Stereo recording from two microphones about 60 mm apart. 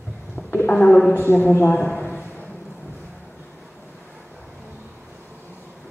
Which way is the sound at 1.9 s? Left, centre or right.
Left.